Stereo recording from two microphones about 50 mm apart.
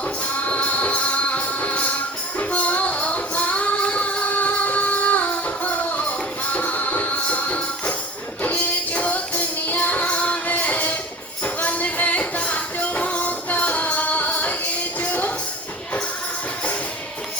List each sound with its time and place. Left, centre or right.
0.3 s music: left